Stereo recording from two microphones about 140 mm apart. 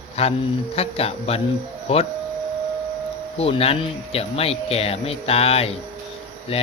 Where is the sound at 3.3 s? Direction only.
45° left (ahead or behind).